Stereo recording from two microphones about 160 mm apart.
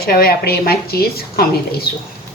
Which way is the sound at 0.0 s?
65° left (ahead or behind).